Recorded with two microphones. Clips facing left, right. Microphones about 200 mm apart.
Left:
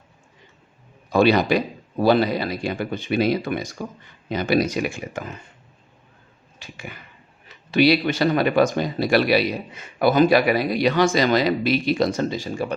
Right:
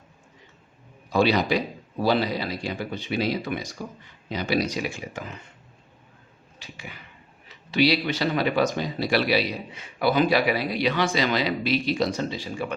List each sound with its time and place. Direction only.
1.1 s speech: 55° left (ahead or behind)
6.6 s a sound: 50° left (ahead or behind)
7.4 s speech: 50° left (ahead or behind)